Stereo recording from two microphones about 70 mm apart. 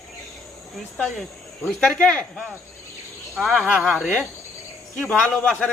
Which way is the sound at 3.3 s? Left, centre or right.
Centre.